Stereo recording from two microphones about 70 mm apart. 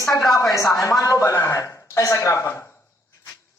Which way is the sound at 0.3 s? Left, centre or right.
Left.